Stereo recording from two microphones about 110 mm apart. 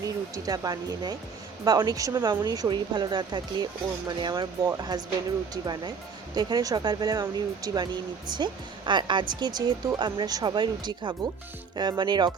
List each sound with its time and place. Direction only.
0.0 s speech: 35° right (ahead or behind)
8.9 s speech: 45° right (ahead or behind)